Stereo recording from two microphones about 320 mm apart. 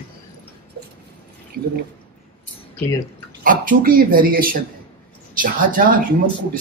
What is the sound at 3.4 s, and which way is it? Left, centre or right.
Speech, right.